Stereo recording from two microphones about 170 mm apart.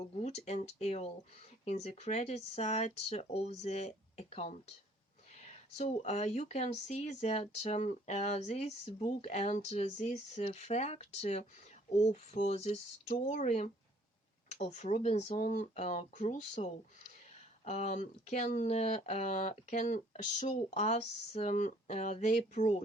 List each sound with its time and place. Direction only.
0.0 s speech: 40° left (ahead or behind)